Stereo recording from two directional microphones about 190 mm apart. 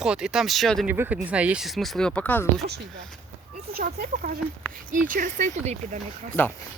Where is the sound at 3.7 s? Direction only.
55° right (ahead or behind); by 6.3 s 35° right (ahead or behind).